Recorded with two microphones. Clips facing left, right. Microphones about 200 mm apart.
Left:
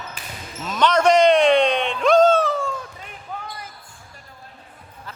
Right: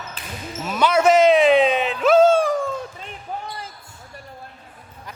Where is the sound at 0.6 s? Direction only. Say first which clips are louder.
Even; 10° right (ahead or behind).